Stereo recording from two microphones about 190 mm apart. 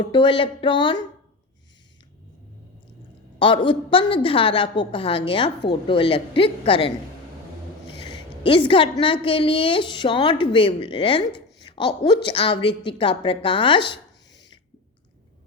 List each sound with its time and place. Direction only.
0.0 s a woman's voice: 25° left (ahead or behind)
3.3 s a woman's voice: 25° left (ahead or behind)